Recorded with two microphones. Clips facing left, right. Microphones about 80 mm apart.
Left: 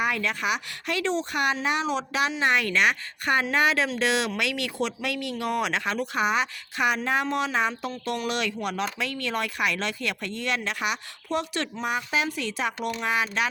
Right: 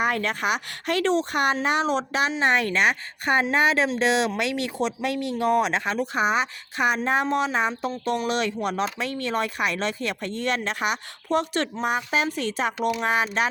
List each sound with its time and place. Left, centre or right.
0.0 s speech: right